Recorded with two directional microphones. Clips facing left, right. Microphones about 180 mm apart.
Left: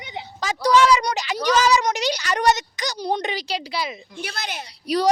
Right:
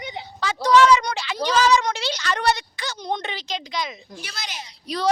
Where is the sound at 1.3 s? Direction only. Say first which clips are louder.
Even; 15° left (ahead or behind).